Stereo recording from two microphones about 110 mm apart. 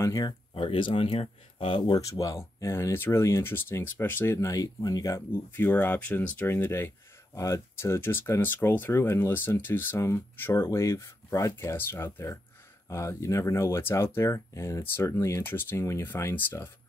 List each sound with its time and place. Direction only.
0.0 s speech: 30° left (ahead or behind)
0.6 s speech: 50° left (ahead or behind)
1.8 s speech: 35° left (ahead or behind); by 16.7 s 20° left (ahead or behind)